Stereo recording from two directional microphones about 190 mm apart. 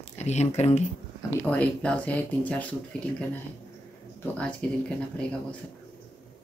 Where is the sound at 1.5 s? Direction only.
5° left (ahead or behind).